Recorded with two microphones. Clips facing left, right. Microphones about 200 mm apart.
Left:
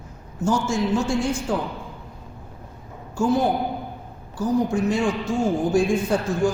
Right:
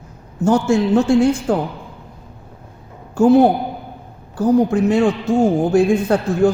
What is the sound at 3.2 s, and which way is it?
A man's voice, 60° right (ahead or behind).